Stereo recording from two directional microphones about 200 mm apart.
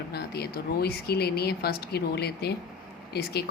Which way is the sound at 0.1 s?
55° left (ahead or behind).